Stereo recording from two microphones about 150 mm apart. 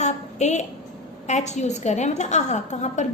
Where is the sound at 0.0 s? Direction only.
50° left (ahead or behind).